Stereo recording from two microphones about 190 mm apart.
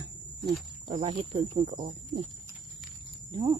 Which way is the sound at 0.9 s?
25° right (ahead or behind).